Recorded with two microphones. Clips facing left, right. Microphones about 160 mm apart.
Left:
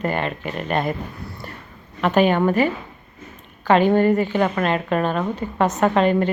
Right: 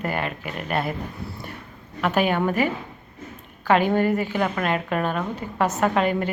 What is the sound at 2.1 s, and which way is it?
Speech, 10° right (ahead or behind).